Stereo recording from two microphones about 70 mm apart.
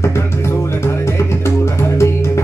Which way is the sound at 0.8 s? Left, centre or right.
Left.